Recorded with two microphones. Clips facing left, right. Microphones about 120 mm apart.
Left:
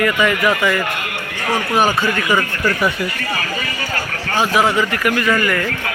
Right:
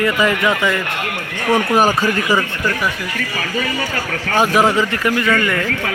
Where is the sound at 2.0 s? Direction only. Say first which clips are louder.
Right 1 dB; 35° right (ahead or behind).